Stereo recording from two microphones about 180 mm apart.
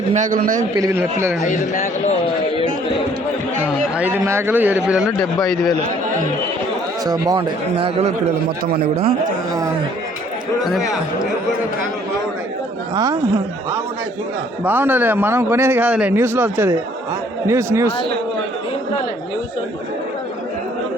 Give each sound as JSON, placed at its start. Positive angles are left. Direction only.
{"t": 0.1, "sound": "a man's voice", "side_deg": -45}
{"t": 0.8, "sound": "a man's voice", "side_deg": -15}
{"t": 1.4, "sound": "a man's voice", "side_deg": 45}
{"t": 3.9, "sound": "a man's voice", "side_deg": -10}
{"t": 7.0, "sound": "speech", "side_deg": -20}
{"t": 13.0, "sound": "speech", "side_deg": -20}
{"t": 14.6, "sound": "a man's voice", "side_deg": -10}